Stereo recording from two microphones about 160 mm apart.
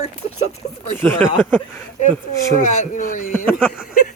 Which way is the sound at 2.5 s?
50° left (ahead or behind).